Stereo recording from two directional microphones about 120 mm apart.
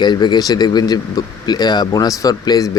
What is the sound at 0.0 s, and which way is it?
Speech, 40° left (ahead or behind).